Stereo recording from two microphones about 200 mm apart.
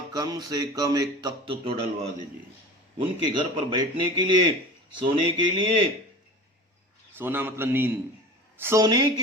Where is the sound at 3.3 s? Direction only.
25° right (ahead or behind).